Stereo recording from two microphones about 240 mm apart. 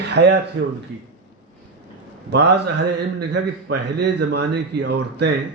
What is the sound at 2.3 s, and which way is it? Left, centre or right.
A man's voice, right.